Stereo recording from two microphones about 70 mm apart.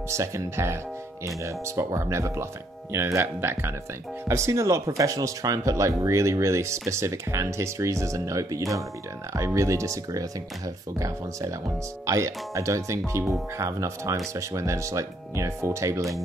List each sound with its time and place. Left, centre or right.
0.1 s speech: right
12.1 s speech: right